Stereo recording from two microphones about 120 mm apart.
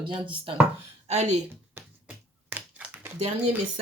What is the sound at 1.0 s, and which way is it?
Speech, 70° right (ahead or behind).